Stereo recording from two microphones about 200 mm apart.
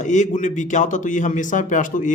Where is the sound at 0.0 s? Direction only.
35° left (ahead or behind).